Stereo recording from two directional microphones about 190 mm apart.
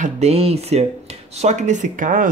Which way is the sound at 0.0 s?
35° right (ahead or behind).